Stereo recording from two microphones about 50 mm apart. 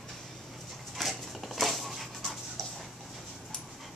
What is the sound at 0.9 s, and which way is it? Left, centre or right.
Dog, centre.